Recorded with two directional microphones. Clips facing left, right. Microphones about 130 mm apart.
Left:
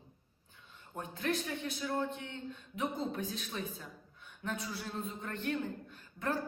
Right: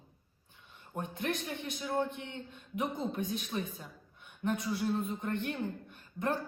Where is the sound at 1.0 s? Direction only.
20° right (ahead or behind).